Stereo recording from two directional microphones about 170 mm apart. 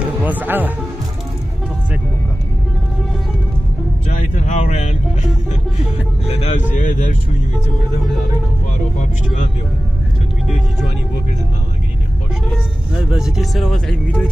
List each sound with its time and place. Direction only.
0.0 s a man's voice: 10° right (ahead or behind)
4.1 s a sound: 45° left (ahead or behind)
6.2 s vehicle: 40° left (ahead or behind)
12.4 s speech: 5° right (ahead or behind)